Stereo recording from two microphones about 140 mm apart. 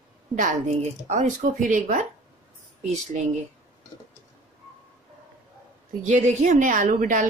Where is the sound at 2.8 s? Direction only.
55° right (ahead or behind).